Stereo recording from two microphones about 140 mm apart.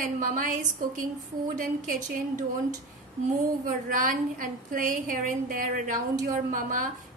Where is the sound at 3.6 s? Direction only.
70° right (ahead or behind).